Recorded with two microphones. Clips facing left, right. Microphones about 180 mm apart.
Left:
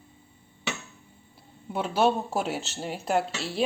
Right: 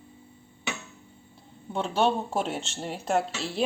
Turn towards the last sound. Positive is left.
turn(degrees=0)  # may be behind; listen again after turning